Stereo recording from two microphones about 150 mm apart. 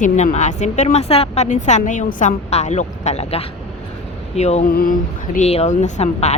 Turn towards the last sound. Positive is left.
turn(degrees=50)  # may be behind; listen again after turning